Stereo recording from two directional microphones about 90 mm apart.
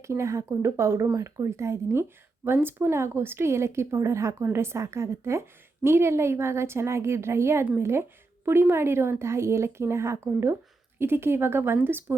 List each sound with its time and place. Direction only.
0.0 s a woman's voice: 35° right (ahead or behind)